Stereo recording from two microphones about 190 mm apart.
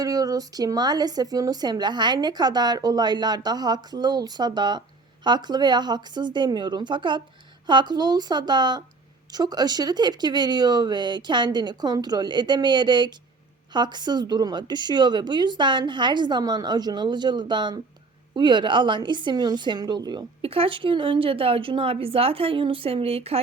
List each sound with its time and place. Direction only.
0.0 s speech: 20° right (ahead or behind)